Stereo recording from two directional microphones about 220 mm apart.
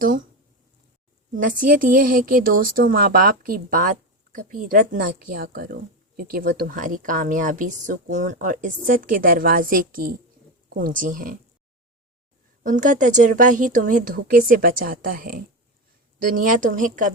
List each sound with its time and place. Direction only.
1.4 s speech: 35° right (ahead or behind)
12.6 s speech: 35° right (ahead or behind)